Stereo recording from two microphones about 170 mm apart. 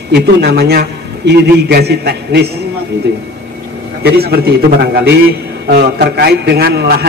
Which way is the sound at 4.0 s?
65° right (ahead or behind).